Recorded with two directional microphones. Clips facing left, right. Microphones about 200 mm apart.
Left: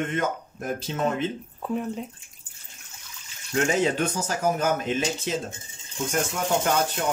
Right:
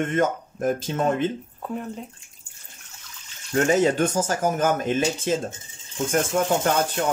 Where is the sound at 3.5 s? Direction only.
45° right (ahead or behind).